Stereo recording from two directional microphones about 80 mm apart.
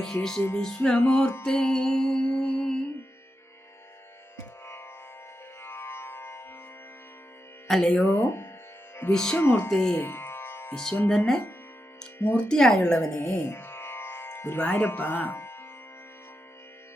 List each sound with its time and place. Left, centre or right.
0.0 s speech: centre
1.5 s music: centre
4.4 s music: left
7.7 s speech: centre
8.0 s speech: left
9.1 s speech: centre
9.4 s speech: left
9.6 s speech: centre
9.9 s music: left
12.2 s speech: left
12.5 s speech: centre
13.1 s speech: left
13.4 s music: left